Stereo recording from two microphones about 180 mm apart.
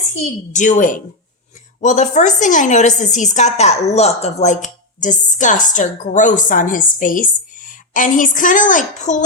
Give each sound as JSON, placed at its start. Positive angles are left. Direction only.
{"t": 0.5, "sound": "a woman's voice", "side_deg": 45}